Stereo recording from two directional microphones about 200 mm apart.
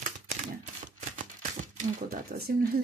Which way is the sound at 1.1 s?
45° right (ahead or behind).